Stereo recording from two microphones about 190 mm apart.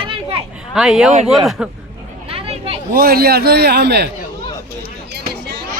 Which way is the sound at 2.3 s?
30° right (ahead or behind).